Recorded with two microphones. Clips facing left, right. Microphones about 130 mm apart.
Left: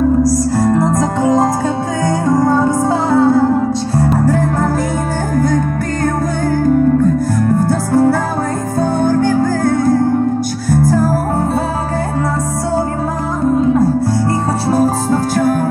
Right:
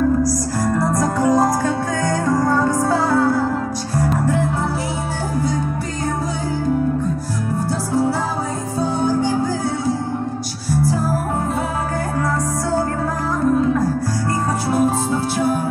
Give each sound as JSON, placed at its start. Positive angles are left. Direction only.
{"t": 0.2, "sound": "music", "side_deg": 25}
{"t": 7.6, "sound": "music", "side_deg": 55}
{"t": 13.4, "sound": "music", "side_deg": 20}
{"t": 14.7, "sound": "music", "side_deg": 40}